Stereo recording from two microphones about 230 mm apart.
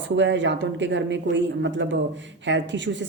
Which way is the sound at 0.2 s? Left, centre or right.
Right.